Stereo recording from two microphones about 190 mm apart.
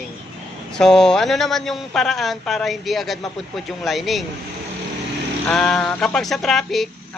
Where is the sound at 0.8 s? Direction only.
5° left (ahead or behind).